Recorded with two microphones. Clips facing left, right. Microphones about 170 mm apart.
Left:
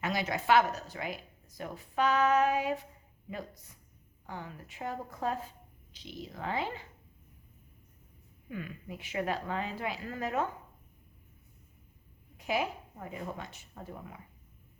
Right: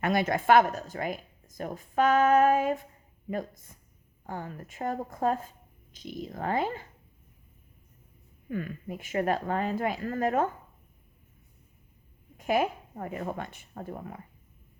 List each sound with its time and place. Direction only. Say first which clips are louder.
0.0 s a woman's voice: right 6 dB; 55° right (ahead or behind)
8.4 s a woman's voice: right 7 dB; 45° right (ahead or behind)
12.4 s a woman's voice: right 6 dB; 50° right (ahead or behind)